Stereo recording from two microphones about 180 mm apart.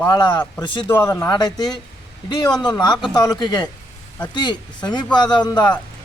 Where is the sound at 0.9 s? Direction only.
15° left (ahead or behind).